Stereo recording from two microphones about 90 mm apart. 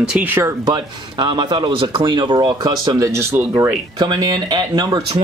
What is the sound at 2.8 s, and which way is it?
Speech, 40° right (ahead or behind).